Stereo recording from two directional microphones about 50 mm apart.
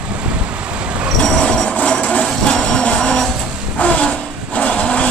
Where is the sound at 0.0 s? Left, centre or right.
Right.